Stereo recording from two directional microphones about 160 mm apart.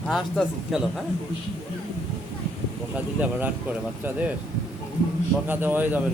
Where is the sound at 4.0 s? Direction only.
10° right (ahead or behind).